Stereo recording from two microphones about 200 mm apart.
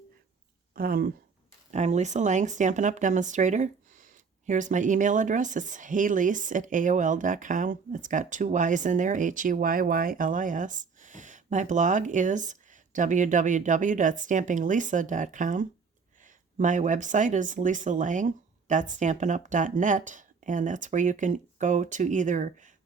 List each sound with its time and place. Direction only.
0.7 s speech: 45° right (ahead or behind)
1.7 s speech: 35° right (ahead or behind)